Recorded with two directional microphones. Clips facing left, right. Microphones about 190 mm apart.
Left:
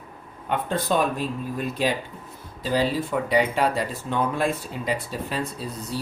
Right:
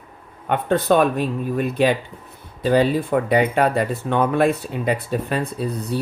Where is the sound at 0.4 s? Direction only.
65° right (ahead or behind).